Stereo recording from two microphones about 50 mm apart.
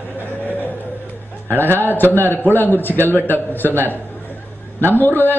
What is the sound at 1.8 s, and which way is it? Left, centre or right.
A man's voice, left.